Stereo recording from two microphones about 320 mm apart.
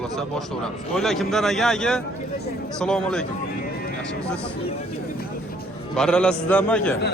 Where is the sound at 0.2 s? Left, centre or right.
Centre.